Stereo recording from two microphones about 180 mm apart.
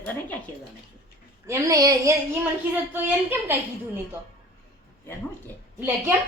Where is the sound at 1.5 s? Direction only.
20° right (ahead or behind).